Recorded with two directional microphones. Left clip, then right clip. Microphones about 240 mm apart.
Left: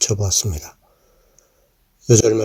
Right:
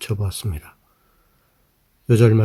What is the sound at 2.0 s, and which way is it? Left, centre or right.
Speech, centre.